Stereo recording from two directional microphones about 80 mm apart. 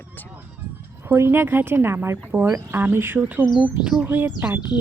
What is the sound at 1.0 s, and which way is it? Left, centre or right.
Speech, right.